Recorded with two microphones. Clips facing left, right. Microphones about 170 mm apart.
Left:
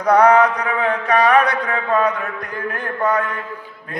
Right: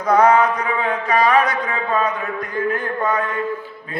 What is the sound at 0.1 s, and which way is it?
Mantra, 65° left (ahead or behind).